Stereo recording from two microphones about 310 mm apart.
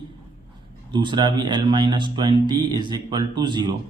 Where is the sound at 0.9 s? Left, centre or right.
Centre.